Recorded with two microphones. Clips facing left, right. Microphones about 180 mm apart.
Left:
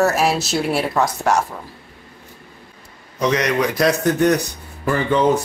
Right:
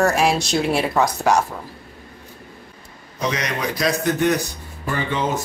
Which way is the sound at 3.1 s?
70° left (ahead or behind).